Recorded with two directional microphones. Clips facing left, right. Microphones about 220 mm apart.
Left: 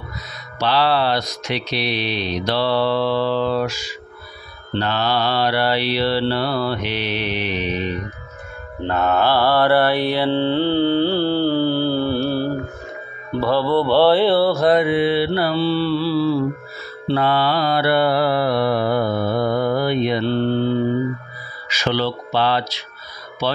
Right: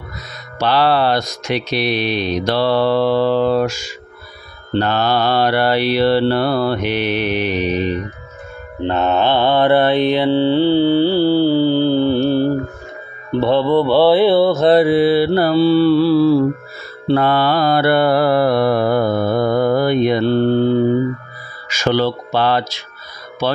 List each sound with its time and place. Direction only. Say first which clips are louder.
0.6 s speech: right 3 dB; 50° right (ahead or behind)
8.8 s mantra: right 2 dB; 25° right (ahead or behind)
13.4 s mantra: right 4 dB; 20° right (ahead or behind)
14.8 s mantra: right 5 dB; 35° right (ahead or behind)
21.6 s speech: right 5 dB; 45° right (ahead or behind)